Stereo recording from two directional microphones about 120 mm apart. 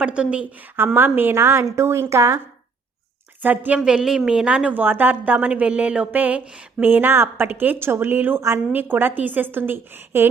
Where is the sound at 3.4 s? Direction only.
15° right (ahead or behind).